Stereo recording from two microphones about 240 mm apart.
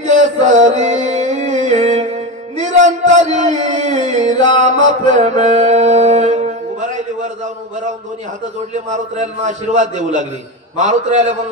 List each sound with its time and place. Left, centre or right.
0.0 s music: right
2.5 s a man's voice: right
4.6 s mantra: right
8.7 s a man's voice: right